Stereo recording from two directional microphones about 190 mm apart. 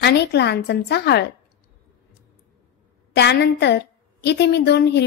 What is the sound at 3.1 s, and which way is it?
A woman's voice, 65° left (ahead or behind).